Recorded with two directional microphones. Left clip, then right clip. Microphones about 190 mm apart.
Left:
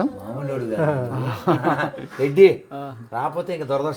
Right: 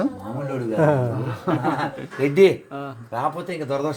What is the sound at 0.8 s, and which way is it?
Speech, 35° right (ahead or behind).